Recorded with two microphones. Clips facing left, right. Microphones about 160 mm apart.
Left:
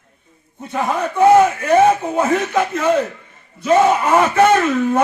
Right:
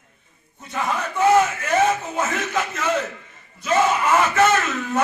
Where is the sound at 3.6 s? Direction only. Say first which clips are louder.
Left 6 dB; 35° left (ahead or behind).